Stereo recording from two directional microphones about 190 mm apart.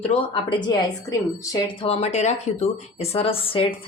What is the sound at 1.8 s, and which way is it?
A woman's voice, 35° left (ahead or behind).